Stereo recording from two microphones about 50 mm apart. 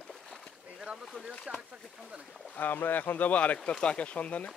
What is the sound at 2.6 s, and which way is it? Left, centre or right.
Speech, left.